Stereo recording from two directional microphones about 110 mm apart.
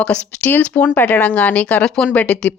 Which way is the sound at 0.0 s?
10° left (ahead or behind).